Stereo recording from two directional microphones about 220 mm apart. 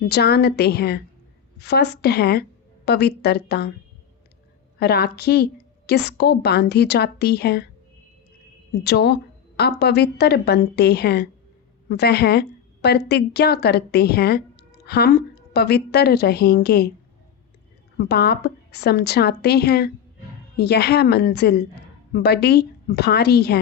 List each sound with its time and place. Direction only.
0.1 s a woman's voice: 45° left (ahead or behind)
4.8 s a woman's voice: 45° left (ahead or behind)
8.8 s a woman's voice: 50° left (ahead or behind)
17.9 s a woman's voice: 45° left (ahead or behind)